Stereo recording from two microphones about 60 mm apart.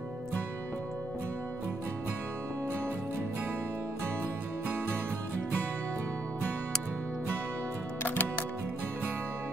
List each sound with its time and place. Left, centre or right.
8.0 s music: left